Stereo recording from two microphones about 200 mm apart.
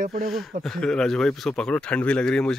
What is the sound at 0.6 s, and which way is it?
Speech, centre (ahead or behind).